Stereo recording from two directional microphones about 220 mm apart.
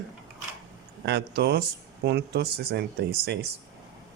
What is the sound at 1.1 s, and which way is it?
Speech, 50° right (ahead or behind).